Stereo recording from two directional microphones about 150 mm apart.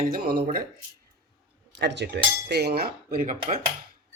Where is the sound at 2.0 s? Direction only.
90° right; by 3.6 s 65° right (ahead or behind).